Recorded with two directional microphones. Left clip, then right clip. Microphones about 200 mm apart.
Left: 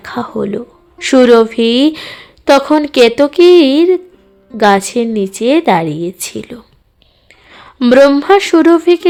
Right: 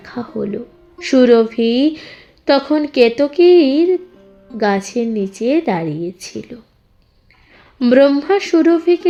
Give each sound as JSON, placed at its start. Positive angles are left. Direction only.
{"t": 0.0, "sound": "a woman's voice", "side_deg": 15}